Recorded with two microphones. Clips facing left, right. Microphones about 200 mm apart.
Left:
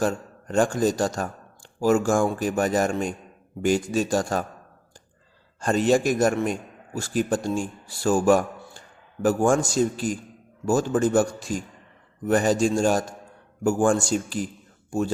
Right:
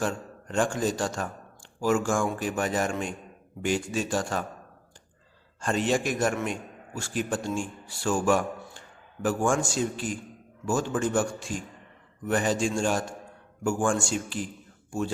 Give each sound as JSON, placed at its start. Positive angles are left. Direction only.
{"t": 0.0, "sound": "a man's voice", "side_deg": 40}
{"t": 5.5, "sound": "a man's voice", "side_deg": 40}